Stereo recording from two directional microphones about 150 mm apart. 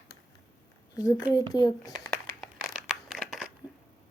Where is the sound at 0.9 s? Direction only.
20° left (ahead or behind).